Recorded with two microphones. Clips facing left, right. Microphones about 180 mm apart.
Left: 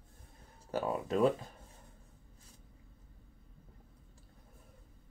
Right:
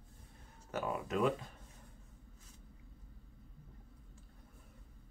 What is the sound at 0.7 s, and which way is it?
Speech, 35° left (ahead or behind).